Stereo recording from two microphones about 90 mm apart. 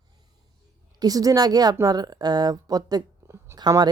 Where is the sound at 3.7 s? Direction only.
45° right (ahead or behind).